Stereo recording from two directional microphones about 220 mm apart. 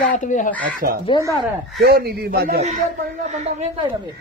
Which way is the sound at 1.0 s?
20° left (ahead or behind).